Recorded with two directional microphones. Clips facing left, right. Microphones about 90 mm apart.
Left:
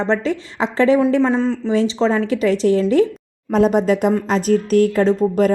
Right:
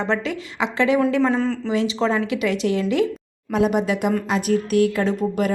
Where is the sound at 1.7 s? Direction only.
35° left (ahead or behind).